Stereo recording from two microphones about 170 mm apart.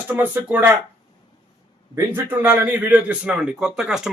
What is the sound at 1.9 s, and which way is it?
Speech, 15° right (ahead or behind).